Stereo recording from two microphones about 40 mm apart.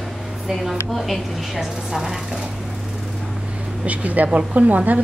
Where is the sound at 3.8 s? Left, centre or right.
Right.